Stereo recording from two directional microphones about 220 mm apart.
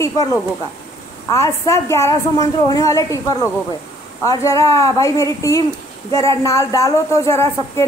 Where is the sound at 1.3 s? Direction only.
15° left (ahead or behind).